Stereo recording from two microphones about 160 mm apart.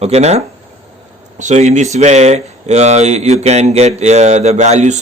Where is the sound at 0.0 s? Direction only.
40° right (ahead or behind).